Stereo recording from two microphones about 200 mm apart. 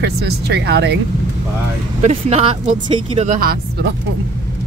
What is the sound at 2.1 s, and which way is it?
Speech, 30° right (ahead or behind).